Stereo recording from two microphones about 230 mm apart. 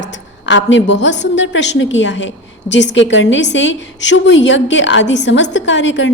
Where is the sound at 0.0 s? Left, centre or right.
Left.